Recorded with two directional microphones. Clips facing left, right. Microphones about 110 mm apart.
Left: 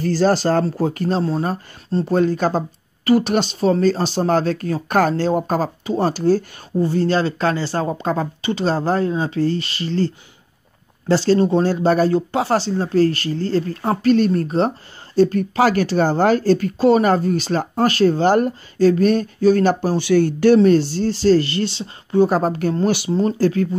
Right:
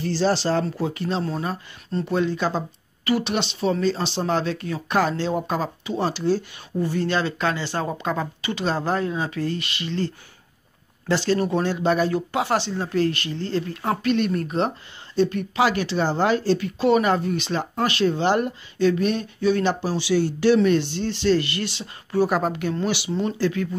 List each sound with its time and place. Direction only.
0.0 s speech: 45° left (ahead or behind)
6.8 s speech: 30° left (ahead or behind)
22.4 s speech: 40° left (ahead or behind)